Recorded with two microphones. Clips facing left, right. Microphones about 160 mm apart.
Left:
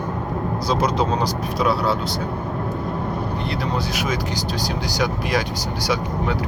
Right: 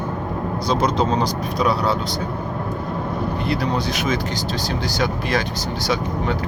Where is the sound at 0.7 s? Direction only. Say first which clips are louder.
Right 1 dB; 10° left (ahead or behind).